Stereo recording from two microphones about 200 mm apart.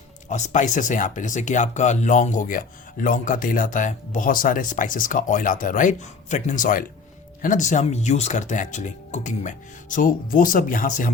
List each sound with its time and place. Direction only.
0.3 s speech: 35° left (ahead or behind)